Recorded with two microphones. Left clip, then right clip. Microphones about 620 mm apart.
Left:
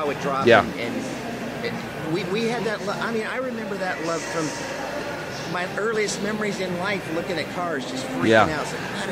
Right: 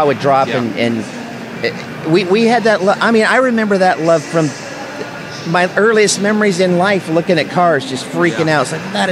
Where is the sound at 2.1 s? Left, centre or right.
Right.